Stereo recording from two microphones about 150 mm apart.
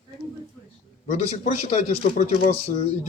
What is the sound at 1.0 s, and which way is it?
Speech, 50° left (ahead or behind).